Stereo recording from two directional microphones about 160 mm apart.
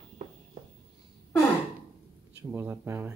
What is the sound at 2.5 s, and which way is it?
Speech, 15° right (ahead or behind).